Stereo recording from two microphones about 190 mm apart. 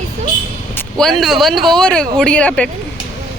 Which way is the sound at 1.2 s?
Centre (ahead or behind).